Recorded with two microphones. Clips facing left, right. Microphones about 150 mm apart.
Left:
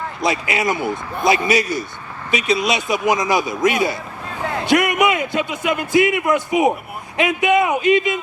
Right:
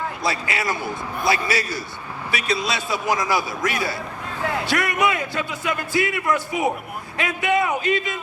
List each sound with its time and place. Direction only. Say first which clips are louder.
0.2 s speech: left 8 dB; 20° left (ahead or behind)